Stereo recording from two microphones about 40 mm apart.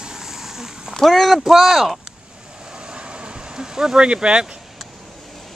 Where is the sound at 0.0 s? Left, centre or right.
Centre.